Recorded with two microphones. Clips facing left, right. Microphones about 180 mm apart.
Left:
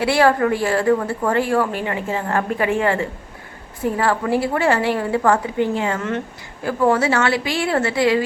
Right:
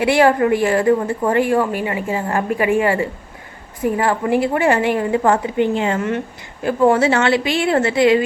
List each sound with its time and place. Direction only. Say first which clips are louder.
0.0 s a woman's voice: right 2 dB; 15° right (ahead or behind)